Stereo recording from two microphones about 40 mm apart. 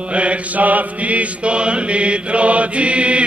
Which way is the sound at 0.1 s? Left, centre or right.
Right.